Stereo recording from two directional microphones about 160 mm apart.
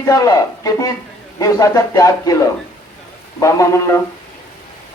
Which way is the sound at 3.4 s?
20° left (ahead or behind).